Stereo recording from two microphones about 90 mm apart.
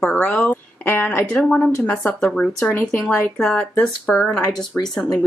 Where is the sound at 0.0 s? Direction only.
20° left (ahead or behind).